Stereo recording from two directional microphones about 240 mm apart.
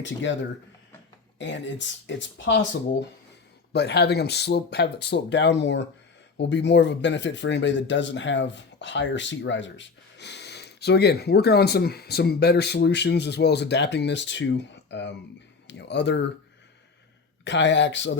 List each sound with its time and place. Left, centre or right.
0.0 s speech: left
1.4 s speech: left
3.7 s speech: left
17.4 s speech: left